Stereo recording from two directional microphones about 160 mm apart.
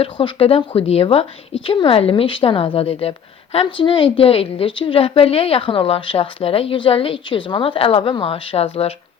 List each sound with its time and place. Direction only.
0.0 s a woman's voice: 35° left (ahead or behind)